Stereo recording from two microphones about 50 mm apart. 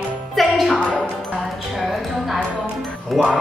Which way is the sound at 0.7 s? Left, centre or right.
Left.